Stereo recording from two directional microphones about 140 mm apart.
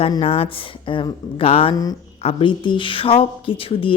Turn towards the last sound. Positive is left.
turn(degrees=40)  # may be behind; listen again after turning